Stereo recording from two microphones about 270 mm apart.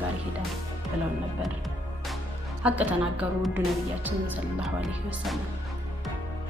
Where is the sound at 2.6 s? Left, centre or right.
Centre.